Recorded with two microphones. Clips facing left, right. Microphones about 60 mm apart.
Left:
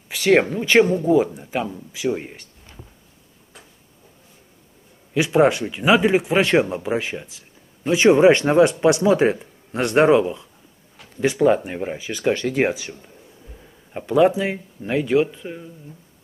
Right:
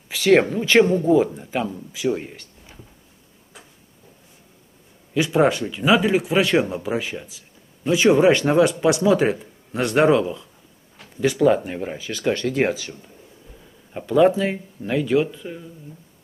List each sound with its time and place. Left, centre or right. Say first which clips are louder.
0.1 s speech: right 1 dB; centre
5.1 s a man's voice: left 2 dB; centre